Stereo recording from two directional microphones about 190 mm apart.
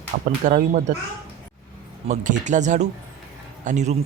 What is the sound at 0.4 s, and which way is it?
Speech, 45° right (ahead or behind).